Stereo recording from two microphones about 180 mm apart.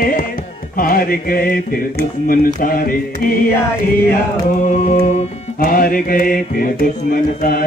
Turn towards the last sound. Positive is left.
turn(degrees=50)  # may be behind; listen again after turning